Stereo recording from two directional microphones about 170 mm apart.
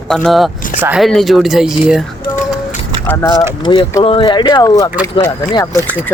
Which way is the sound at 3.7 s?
25° left (ahead or behind).